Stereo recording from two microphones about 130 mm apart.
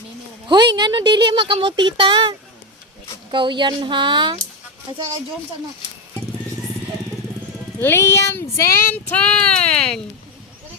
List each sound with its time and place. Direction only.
0.4 s speech: 35° right (ahead or behind)
3.3 s speech: 40° right (ahead or behind)
7.8 s child singing: 20° left (ahead or behind)